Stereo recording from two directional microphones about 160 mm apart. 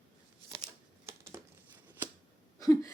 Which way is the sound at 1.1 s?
15° right (ahead or behind).